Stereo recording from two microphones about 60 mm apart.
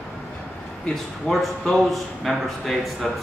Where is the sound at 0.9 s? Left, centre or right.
Centre.